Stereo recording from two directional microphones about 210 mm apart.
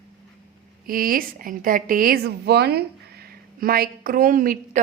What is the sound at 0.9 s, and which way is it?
A woman's voice, 45° right (ahead or behind).